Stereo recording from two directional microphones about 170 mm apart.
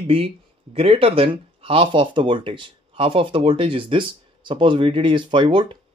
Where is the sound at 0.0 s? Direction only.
35° right (ahead or behind).